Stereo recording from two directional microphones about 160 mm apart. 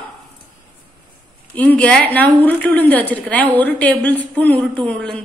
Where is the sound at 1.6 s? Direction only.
10° left (ahead or behind).